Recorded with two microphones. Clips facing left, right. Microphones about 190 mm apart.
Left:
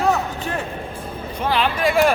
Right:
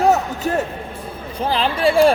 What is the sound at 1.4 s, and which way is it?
Speech, 30° right (ahead or behind).